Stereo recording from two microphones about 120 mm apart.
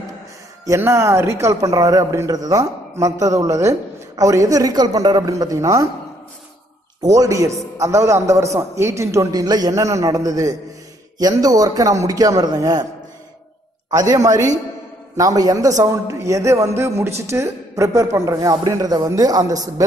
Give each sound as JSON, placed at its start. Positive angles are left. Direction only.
{"t": 0.7, "sound": "a man's voice", "side_deg": -25}
{"t": 7.0, "sound": "a man's voice", "side_deg": -30}
{"t": 13.8, "sound": "a man's voice", "side_deg": -30}